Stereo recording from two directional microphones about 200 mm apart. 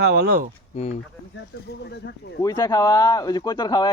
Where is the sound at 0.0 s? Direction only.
55° right (ahead or behind).